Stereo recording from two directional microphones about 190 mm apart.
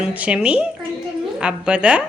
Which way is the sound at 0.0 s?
5° right (ahead or behind).